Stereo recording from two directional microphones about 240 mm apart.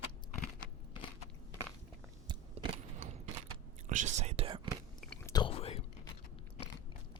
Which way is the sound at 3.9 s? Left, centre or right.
Right.